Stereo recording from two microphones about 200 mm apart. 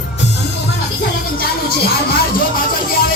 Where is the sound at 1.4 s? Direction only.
50° left (ahead or behind).